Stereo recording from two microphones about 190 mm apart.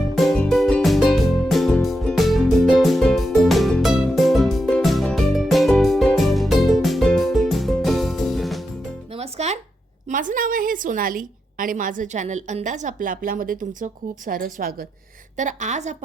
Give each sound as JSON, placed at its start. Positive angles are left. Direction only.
{"t": 0.2, "sound": "music", "side_deg": 0}
{"t": 9.1, "sound": "music", "side_deg": -35}
{"t": 10.1, "sound": "a woman's voice", "side_deg": -45}
{"t": 15.4, "sound": "a woman's voice", "side_deg": -40}